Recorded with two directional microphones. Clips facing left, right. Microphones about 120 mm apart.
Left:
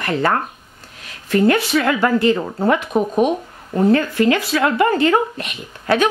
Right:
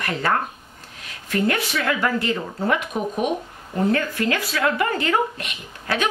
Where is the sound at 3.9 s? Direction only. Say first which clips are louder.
Left 7 dB; 30° left (ahead or behind).